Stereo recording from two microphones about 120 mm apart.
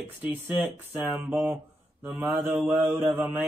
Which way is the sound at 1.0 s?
5° right (ahead or behind).